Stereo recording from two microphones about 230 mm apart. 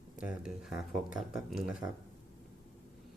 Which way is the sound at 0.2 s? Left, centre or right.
Centre.